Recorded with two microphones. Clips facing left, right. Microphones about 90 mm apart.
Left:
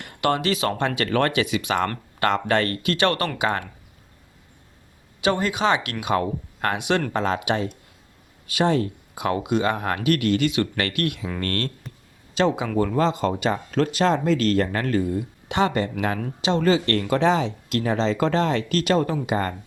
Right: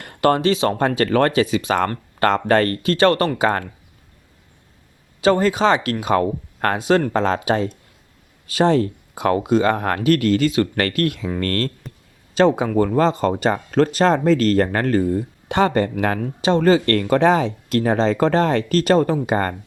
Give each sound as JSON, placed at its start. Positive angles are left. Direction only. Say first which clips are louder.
{"t": 0.0, "sound": "speech", "louder": "right 6 dB", "side_deg": -40}
{"t": 5.2, "sound": "speech", "louder": "right 6 dB", "side_deg": -40}
{"t": 11.9, "sound": "a sound", "louder": "right 3 dB", "side_deg": 0}
{"t": 12.3, "sound": "speech", "louder": "right 5 dB", "side_deg": -40}